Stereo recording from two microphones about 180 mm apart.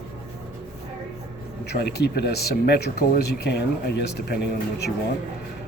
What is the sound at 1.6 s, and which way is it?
Speech, 60° left (ahead or behind).